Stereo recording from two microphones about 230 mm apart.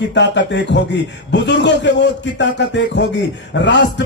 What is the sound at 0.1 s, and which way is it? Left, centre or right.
A man's voice, left.